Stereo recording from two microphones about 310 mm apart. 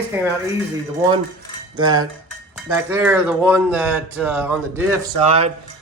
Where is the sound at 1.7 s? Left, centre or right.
Centre.